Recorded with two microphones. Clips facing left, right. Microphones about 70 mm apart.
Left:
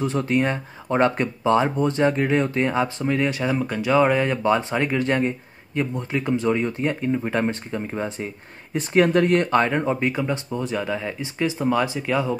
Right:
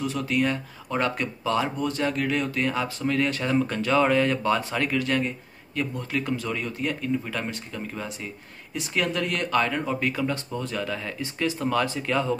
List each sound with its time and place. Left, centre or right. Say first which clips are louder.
0.0 s speech: left 4 dB; left; by 12.4 s centre